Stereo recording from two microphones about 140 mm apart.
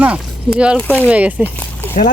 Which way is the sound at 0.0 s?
10° right (ahead or behind).